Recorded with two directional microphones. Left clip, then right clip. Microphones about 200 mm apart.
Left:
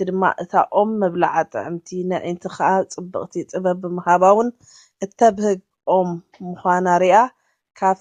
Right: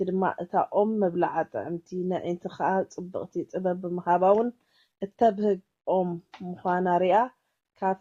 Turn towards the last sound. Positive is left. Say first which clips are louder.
# left 10 dB
turn(degrees=15)  # may be behind; listen again after turning